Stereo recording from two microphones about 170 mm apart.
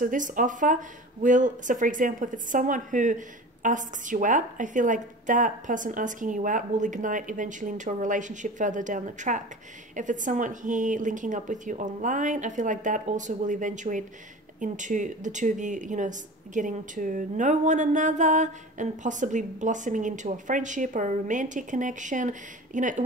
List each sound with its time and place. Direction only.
0.0 s speech: 50° right (ahead or behind)